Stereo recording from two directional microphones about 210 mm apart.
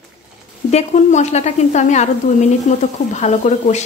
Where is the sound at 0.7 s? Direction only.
30° left (ahead or behind).